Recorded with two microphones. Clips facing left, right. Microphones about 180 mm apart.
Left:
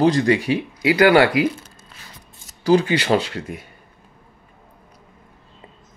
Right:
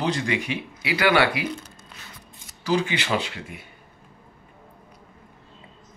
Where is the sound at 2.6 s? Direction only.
35° left (ahead or behind).